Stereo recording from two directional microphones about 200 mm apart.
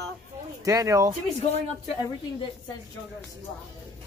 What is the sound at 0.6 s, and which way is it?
Speech, 15° right (ahead or behind).